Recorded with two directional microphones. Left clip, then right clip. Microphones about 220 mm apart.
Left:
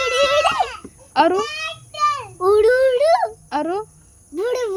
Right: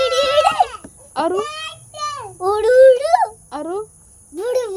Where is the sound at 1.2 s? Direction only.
50° left (ahead or behind).